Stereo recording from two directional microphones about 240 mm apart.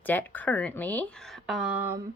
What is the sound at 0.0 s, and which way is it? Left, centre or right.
A woman's voice, centre.